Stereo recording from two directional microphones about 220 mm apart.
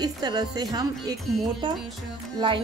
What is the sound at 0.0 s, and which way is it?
A woman's voice, 15° right (ahead or behind).